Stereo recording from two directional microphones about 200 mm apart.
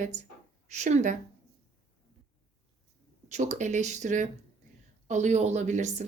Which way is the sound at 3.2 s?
35° right (ahead or behind).